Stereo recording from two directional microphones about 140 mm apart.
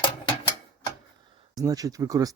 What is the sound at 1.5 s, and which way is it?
Speech, 25° right (ahead or behind).